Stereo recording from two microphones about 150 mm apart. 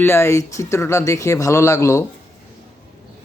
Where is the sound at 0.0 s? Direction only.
15° left (ahead or behind).